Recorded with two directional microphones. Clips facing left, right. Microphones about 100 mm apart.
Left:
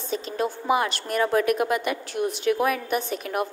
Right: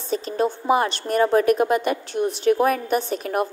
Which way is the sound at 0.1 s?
35° right (ahead or behind).